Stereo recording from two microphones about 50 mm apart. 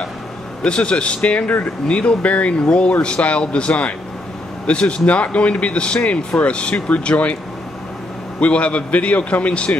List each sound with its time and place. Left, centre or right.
0.7 s speech: left
8.4 s speech: left